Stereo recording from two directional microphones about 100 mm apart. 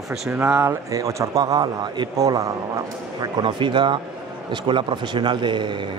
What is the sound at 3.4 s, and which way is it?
Speech, 55° right (ahead or behind).